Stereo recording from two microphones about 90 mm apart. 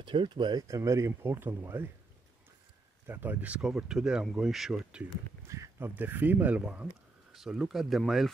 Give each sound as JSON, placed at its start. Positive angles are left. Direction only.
{"t": 0.0, "sound": "speech", "side_deg": -60}
{"t": 0.7, "sound": "speech", "side_deg": -35}
{"t": 3.1, "sound": "speech", "side_deg": -20}
{"t": 5.5, "sound": "a sound", "side_deg": -35}
{"t": 5.9, "sound": "speech", "side_deg": -20}